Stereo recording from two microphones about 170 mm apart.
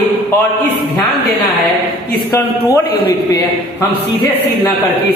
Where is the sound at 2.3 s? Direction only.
15° left (ahead or behind).